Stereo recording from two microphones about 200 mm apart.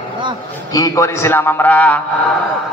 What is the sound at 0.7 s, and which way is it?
A man's voice, 15° left (ahead or behind).